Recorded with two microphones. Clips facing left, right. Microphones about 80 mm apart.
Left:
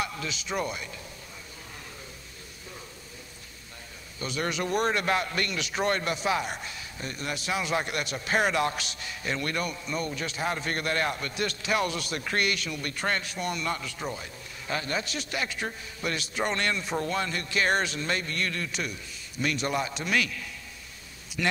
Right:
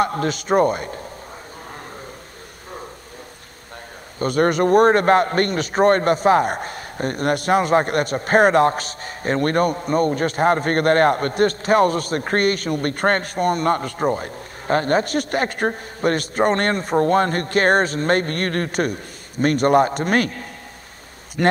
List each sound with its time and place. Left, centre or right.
0.0 s a man's voice: right
4.2 s a man's voice: right